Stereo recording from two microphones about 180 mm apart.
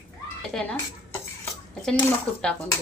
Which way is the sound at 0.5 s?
5° left (ahead or behind).